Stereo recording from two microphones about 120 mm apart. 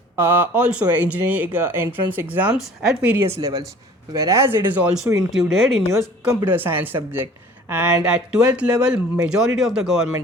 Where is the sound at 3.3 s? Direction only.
30° right (ahead or behind); by 5.0 s 10° right (ahead or behind).